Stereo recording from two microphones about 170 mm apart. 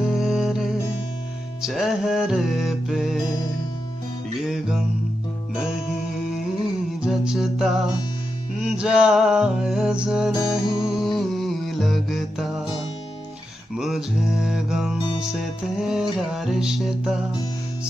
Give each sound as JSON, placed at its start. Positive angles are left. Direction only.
{"t": 0.0, "sound": "music", "side_deg": 0}
{"t": 4.5, "sound": "music", "side_deg": -5}
{"t": 7.0, "sound": "music", "side_deg": -5}
{"t": 10.6, "sound": "music", "side_deg": 30}
{"t": 11.0, "sound": "music", "side_deg": 0}
{"t": 13.7, "sound": "music", "side_deg": 0}